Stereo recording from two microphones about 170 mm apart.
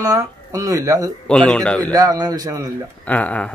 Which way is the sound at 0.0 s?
20° right (ahead or behind).